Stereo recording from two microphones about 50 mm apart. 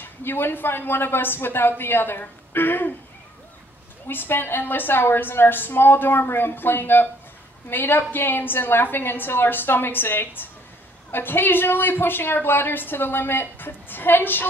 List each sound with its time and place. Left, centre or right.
0.0 s a woman's voice: left
4.1 s a woman's voice: left